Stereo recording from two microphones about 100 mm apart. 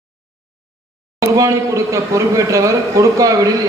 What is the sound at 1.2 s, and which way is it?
A man's voice, 30° right (ahead or behind).